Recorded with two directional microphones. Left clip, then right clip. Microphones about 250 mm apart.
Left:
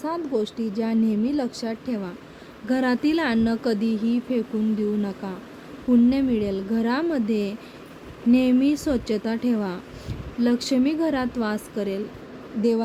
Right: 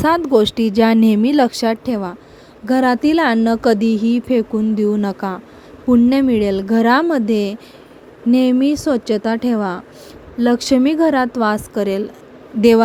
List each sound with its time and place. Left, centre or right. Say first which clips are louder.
0.0 s a woman's voice: right 13 dB; right